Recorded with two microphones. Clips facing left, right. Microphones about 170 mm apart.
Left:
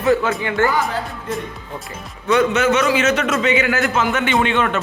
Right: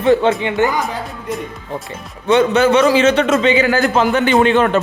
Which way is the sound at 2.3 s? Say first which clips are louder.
Right 4 dB; 30° right (ahead or behind).